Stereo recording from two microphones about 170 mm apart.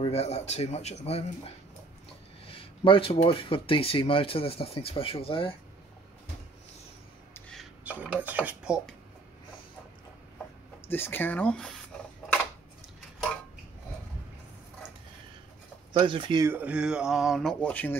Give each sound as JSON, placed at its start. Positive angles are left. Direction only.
{"t": 0.0, "sound": "speech", "side_deg": 35}
{"t": 2.4, "sound": "speech", "side_deg": 35}
{"t": 7.8, "sound": "speech", "side_deg": -10}
{"t": 10.9, "sound": "speech", "side_deg": 10}
{"t": 15.9, "sound": "speech", "side_deg": -30}
{"t": 16.4, "sound": "speech", "side_deg": -10}